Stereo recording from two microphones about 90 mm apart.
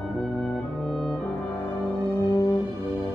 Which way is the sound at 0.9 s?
Centre (ahead or behind).